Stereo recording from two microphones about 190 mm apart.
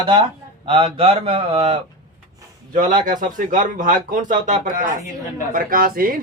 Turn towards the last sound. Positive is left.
turn(degrees=-50)  # may be behind; listen again after turning